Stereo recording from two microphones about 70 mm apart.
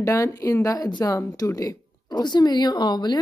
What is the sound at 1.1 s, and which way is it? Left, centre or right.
A woman's voice, left.